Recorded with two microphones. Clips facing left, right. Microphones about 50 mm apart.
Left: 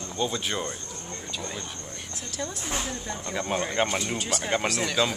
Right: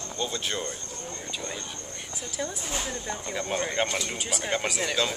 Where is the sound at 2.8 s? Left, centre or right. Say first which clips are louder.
Even; centre.